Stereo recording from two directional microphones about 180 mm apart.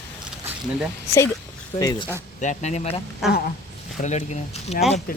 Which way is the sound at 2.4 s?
40° left (ahead or behind).